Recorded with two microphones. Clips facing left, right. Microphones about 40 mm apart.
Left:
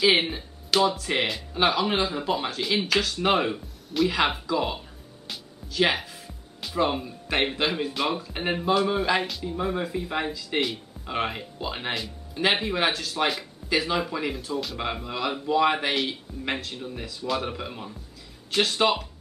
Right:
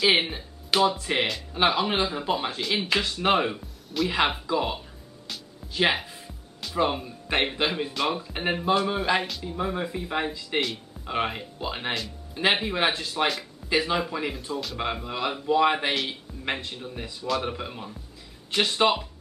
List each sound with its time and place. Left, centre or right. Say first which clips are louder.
0.0 s speech: left 1 dB; centre
0.7 s speech: even; centre
1.1 s speech: even; centre
2.9 s speech: right 1 dB; centre
4.1 s speech: even; centre
5.9 s music: right 1 dB; centre
6.6 s speech: even; centre